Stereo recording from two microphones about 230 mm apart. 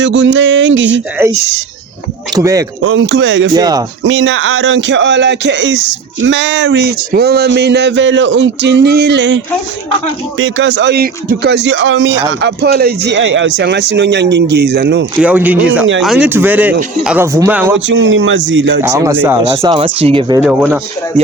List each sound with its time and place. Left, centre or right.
0.0 s speech: right
2.3 s speech: centre
2.8 s speech: right
3.5 s speech: centre
4.0 s speech: right
15.2 s speech: centre
17.8 s speech: right
18.8 s speech: centre
20.4 s speech: centre